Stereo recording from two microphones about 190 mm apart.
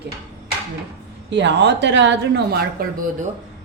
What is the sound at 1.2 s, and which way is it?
Speech, 65° right (ahead or behind).